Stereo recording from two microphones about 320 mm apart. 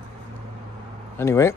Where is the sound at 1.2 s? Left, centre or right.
Centre.